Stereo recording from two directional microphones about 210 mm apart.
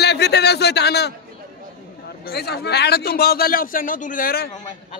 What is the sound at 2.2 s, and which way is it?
A man's voice, 50° left (ahead or behind).